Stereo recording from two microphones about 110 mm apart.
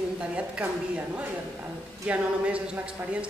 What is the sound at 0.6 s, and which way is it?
Speech, 20° right (ahead or behind).